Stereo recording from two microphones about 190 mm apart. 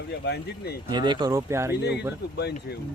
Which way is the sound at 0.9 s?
25° right (ahead or behind).